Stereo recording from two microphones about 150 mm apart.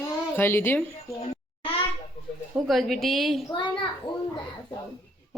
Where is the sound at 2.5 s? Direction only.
Centre (ahead or behind).